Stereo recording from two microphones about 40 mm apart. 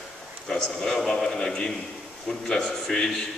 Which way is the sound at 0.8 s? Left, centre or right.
Centre.